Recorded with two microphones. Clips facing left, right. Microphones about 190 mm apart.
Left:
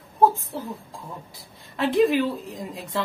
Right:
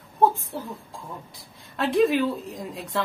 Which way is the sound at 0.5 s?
Centre (ahead or behind).